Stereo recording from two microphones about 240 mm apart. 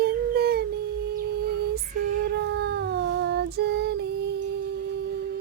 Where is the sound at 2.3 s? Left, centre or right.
Right.